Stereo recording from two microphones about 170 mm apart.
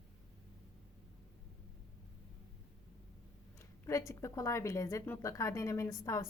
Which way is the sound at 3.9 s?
15° left (ahead or behind).